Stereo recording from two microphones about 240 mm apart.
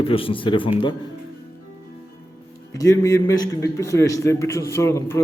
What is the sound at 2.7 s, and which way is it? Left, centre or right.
A man's voice, centre.